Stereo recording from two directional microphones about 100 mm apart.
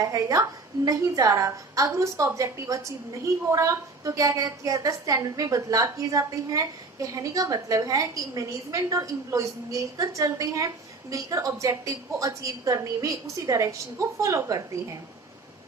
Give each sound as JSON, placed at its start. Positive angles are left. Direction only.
{"t": 0.0, "sound": "a woman's voice", "side_deg": -35}